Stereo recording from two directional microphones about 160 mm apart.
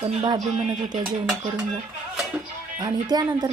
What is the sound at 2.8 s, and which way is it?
Speech, 25° right (ahead or behind).